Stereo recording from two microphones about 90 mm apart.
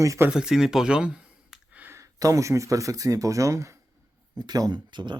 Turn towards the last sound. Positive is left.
turn(degrees=-60)  # may be behind; listen again after turning